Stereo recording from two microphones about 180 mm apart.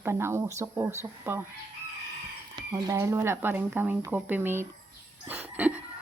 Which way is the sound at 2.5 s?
20° right (ahead or behind).